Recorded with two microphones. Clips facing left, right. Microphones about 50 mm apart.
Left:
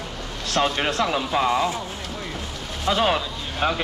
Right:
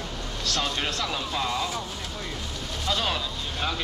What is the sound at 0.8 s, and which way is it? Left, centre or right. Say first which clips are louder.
Speech: left 7 dB; left.